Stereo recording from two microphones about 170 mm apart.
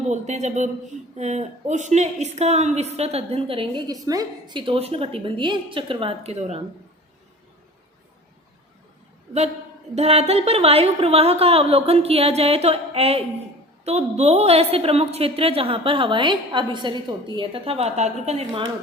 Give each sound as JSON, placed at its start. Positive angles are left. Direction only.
{"t": 0.1, "sound": "a man's voice", "side_deg": -45}
{"t": 9.9, "sound": "a woman's voice", "side_deg": -40}